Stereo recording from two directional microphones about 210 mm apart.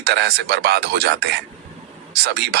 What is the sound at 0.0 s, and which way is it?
Speech, 50° right (ahead or behind).